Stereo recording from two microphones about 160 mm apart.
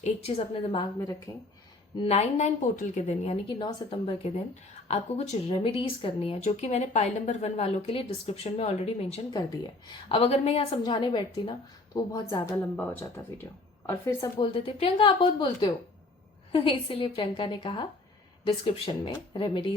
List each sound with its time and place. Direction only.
0.0 s speech: 40° left (ahead or behind)
0.9 s a woman's voice: 20° left (ahead or behind)
2.0 s speech: 40° left (ahead or behind)
3.6 s speech: 30° left (ahead or behind)
9.3 s a woman's voice: 25° left (ahead or behind)
14.3 s speech: 35° left (ahead or behind)